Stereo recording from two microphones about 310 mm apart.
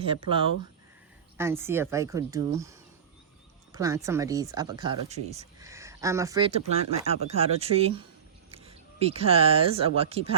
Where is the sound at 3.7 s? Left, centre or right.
Centre.